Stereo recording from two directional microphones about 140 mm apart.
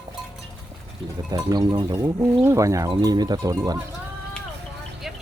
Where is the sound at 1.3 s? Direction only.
25° right (ahead or behind).